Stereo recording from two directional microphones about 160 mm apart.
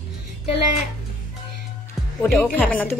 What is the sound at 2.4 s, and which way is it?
Speech, 5° right (ahead or behind).